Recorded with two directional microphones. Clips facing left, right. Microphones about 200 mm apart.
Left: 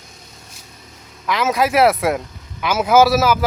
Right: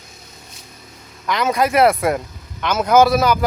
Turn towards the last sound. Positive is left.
turn(degrees=5)  # may be behind; listen again after turning